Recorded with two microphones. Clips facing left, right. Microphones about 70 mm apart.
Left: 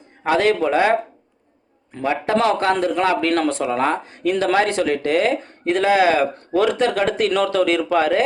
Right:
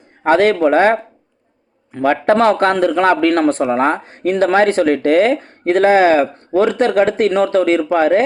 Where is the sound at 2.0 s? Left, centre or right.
Right.